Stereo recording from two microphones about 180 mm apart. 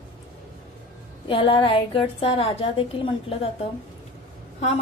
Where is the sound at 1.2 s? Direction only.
30° left (ahead or behind).